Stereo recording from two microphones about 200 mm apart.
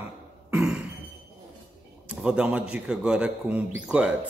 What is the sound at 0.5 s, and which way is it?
Cough, 5° right (ahead or behind).